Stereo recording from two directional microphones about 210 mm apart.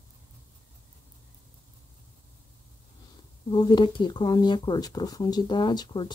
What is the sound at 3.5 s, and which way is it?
Speech, 20° left (ahead or behind).